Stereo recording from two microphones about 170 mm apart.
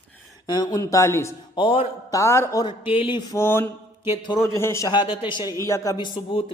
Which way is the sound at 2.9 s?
30° left (ahead or behind).